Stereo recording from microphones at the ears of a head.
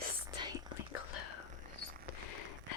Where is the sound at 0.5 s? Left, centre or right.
Left.